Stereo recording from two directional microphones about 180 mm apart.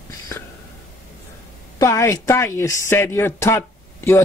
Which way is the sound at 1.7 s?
15° left (ahead or behind).